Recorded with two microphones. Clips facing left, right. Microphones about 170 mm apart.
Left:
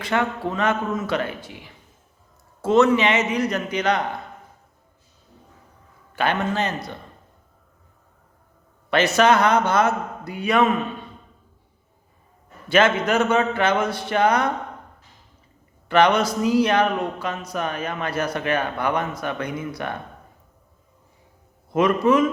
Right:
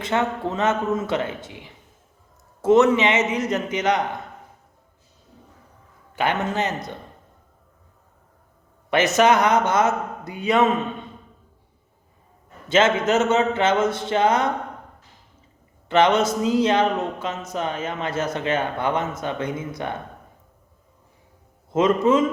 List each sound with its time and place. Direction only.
0.0 s speech: 20° right (ahead or behind)
6.4 s speech: 20° right (ahead or behind)
8.9 s speech: 20° right (ahead or behind)
12.6 s speech: 20° right (ahead or behind)
15.9 s speech: 20° right (ahead or behind)
21.7 s speech: 20° right (ahead or behind)